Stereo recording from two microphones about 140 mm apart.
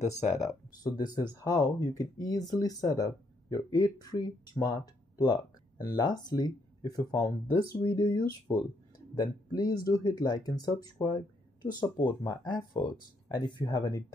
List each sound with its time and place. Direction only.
0.8 s speech: 30° left (ahead or behind)